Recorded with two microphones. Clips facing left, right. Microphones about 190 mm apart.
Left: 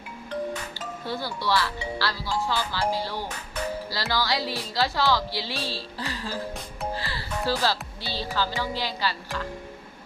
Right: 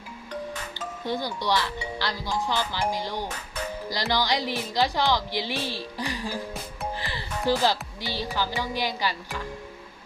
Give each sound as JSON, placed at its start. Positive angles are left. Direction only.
{"t": 1.0, "sound": "speech", "side_deg": -15}